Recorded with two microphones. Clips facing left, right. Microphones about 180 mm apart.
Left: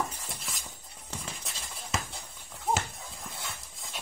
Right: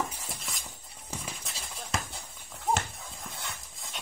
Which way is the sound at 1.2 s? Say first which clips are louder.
Right 1 dB; centre (ahead or behind).